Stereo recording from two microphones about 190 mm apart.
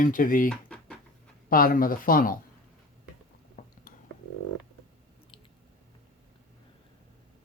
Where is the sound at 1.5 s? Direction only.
50° left (ahead or behind).